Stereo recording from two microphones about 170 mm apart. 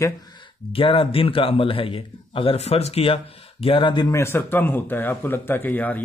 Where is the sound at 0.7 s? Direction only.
30° left (ahead or behind); by 6.0 s 10° left (ahead or behind).